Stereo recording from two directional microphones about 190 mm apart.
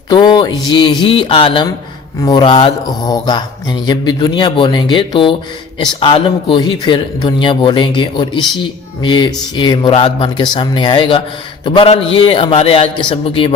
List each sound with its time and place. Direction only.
0.1 s a man's voice: 25° left (ahead or behind)